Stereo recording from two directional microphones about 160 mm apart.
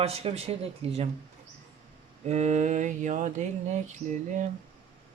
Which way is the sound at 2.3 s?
45° right (ahead or behind).